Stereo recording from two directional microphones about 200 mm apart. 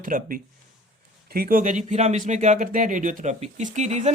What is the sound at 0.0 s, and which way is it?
Speech, 45° right (ahead or behind).